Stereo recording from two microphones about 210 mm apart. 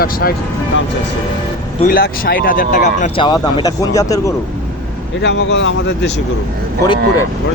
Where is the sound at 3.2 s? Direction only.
20° left (ahead or behind).